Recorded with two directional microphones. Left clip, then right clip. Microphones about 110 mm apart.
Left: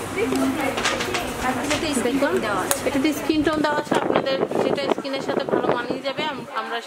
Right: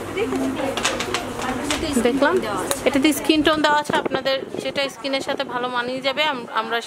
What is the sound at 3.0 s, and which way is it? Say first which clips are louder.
A woman's voice: right 5 dB; 50° right (ahead or behind).